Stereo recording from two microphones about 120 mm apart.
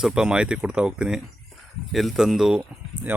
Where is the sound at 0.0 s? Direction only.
5° right (ahead or behind).